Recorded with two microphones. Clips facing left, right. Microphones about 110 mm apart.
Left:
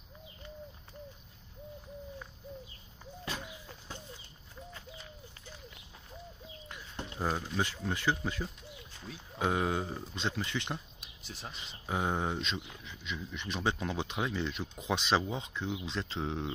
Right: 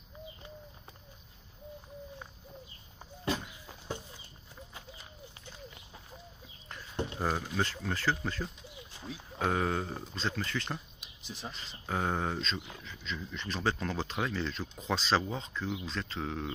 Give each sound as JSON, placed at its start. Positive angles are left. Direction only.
{"t": 7.2, "sound": "speech", "side_deg": -5}
{"t": 7.6, "sound": "speech", "side_deg": 15}
{"t": 9.0, "sound": "speech", "side_deg": 0}
{"t": 11.2, "sound": "speech", "side_deg": 0}
{"t": 11.8, "sound": "speech", "side_deg": 10}